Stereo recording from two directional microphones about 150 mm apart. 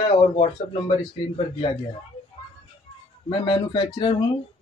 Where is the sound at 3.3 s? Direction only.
30° left (ahead or behind).